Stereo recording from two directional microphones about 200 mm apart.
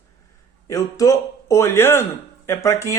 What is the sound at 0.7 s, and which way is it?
A man's voice, 15° left (ahead or behind).